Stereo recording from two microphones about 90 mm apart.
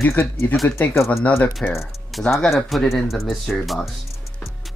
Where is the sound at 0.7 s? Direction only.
30° left (ahead or behind).